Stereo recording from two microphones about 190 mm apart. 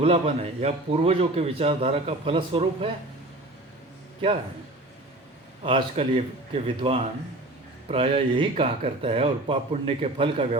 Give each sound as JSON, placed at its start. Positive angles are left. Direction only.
{"t": 0.0, "sound": "a man's voice", "side_deg": -30}
{"t": 5.6, "sound": "a man's voice", "side_deg": -30}